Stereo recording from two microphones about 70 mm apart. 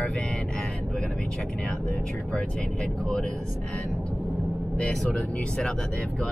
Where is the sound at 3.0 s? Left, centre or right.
Centre.